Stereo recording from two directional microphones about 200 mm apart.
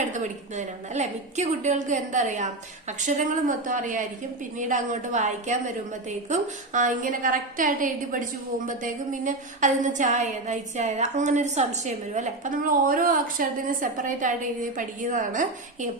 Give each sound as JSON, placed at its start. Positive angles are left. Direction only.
{"t": 0.1, "sound": "a woman's voice", "side_deg": -35}